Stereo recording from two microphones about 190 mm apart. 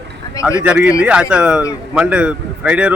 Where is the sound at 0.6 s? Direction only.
5° right (ahead or behind).